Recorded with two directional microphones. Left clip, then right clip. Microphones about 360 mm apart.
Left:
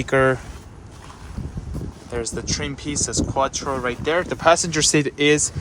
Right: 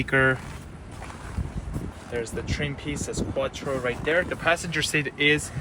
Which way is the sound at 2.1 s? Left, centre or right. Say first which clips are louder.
Left 4 dB; centre.